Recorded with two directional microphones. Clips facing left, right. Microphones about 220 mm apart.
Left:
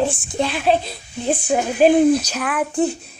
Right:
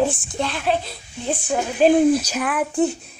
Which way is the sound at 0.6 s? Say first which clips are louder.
Left 4 dB; 20° left (ahead or behind).